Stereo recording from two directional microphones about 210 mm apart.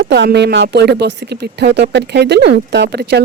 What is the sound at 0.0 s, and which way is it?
Speech, 55° right (ahead or behind).